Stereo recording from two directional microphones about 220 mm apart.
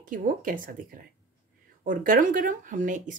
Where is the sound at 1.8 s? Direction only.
40° right (ahead or behind).